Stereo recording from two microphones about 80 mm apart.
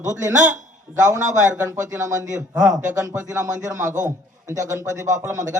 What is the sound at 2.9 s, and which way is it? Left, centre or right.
A man's voice, right.